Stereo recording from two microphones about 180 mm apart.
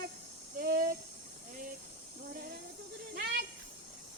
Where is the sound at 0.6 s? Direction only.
55° right (ahead or behind).